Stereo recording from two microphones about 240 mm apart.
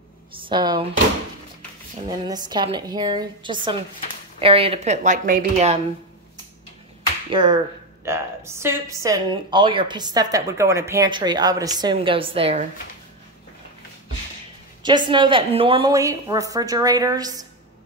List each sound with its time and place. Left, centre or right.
0.5 s speech: centre
2.0 s a woman's voice: centre
7.2 s a woman's voice: centre
14.8 s a woman's voice: centre